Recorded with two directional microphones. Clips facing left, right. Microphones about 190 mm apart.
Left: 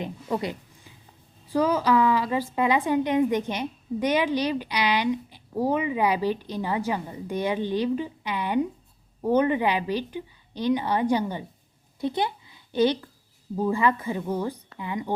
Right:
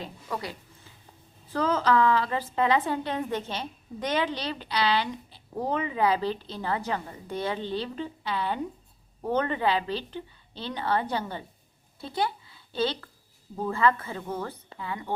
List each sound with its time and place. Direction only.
0.0 s a woman's voice: 20° left (ahead or behind)